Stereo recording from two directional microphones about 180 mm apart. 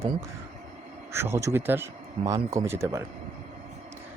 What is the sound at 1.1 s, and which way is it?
Speech, 15° right (ahead or behind).